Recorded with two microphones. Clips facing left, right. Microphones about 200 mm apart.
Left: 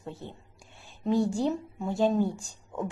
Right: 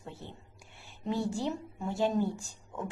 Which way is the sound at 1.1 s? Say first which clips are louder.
Left 6 dB; 15° left (ahead or behind).